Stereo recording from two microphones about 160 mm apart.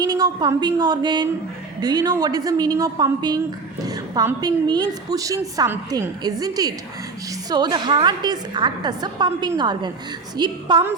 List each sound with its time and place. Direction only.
0.0 s a woman's voice: 25° right (ahead or behind)